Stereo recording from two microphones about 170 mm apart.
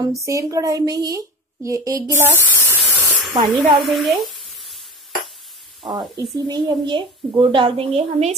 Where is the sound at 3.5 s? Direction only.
30° right (ahead or behind).